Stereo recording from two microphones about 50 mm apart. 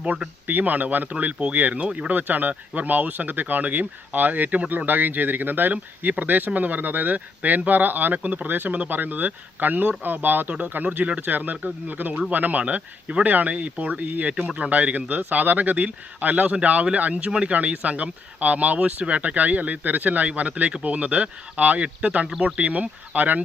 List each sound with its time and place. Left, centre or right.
0.4 s speech: right
11.5 s speech: right
11.9 s speech: right